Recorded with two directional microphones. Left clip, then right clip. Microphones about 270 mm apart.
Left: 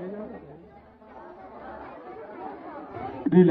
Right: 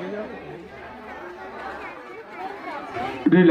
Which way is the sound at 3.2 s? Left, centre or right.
Left.